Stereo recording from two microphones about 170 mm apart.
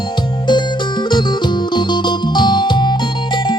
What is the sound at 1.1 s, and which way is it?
Music, 25° left (ahead or behind).